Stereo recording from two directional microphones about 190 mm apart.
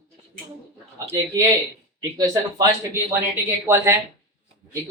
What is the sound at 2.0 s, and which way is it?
Speech, 20° right (ahead or behind).